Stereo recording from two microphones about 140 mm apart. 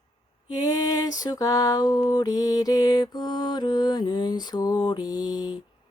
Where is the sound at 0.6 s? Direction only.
25° left (ahead or behind).